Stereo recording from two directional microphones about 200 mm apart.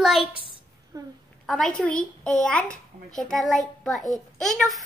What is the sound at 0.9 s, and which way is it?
Speech, 15° right (ahead or behind).